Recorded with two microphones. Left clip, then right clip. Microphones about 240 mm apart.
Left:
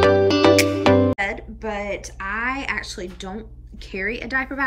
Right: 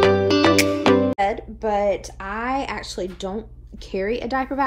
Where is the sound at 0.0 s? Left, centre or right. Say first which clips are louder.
Left 1 dB; centre.